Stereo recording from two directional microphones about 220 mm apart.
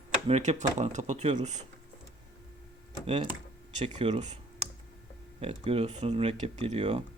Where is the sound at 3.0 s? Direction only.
30° right (ahead or behind).